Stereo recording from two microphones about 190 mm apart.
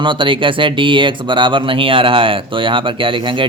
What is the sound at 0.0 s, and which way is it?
Speech, 25° right (ahead or behind).